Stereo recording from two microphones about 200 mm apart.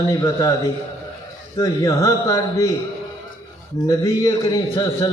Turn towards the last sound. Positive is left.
turn(degrees=15)  # may be behind; listen again after turning